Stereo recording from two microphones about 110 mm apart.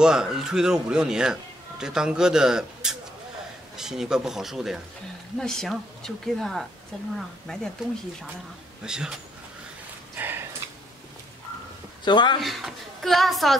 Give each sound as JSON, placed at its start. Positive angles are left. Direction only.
{"t": 0.0, "sound": "speech", "side_deg": -5}
{"t": 8.8, "sound": "speech", "side_deg": -5}
{"t": 10.1, "sound": "a sound", "side_deg": -20}
{"t": 12.0, "sound": "speech", "side_deg": 45}
{"t": 12.4, "sound": "speech", "side_deg": 0}